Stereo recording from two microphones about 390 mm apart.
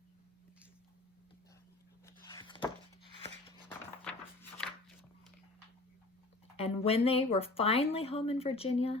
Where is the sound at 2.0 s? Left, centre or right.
Centre.